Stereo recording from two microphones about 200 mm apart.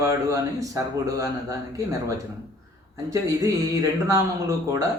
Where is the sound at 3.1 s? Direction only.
15° right (ahead or behind).